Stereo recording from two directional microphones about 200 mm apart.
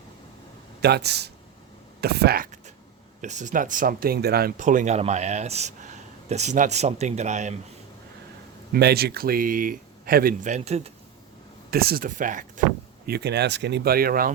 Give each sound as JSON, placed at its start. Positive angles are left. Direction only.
{"t": 0.8, "sound": "speech", "side_deg": -55}
{"t": 2.0, "sound": "a sound", "side_deg": -50}
{"t": 3.2, "sound": "speech", "side_deg": -40}
{"t": 8.7, "sound": "speech", "side_deg": -50}
{"t": 11.7, "sound": "speech", "side_deg": -50}
{"t": 13.1, "sound": "speech", "side_deg": -55}